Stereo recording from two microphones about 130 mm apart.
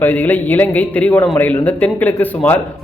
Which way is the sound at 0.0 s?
15° left (ahead or behind).